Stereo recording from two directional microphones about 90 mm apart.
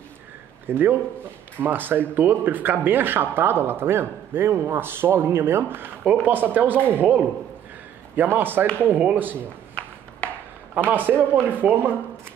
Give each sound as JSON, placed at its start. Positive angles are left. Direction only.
{"t": 0.7, "sound": "speech", "side_deg": -25}
{"t": 9.8, "sound": "a sound", "side_deg": 10}
{"t": 10.7, "sound": "speech", "side_deg": -20}